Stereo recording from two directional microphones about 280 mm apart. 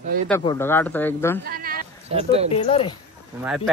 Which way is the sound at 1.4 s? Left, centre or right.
Right.